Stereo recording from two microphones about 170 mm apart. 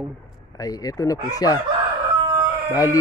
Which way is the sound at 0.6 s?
20° left (ahead or behind).